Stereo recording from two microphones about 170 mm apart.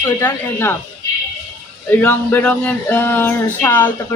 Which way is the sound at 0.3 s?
15° left (ahead or behind).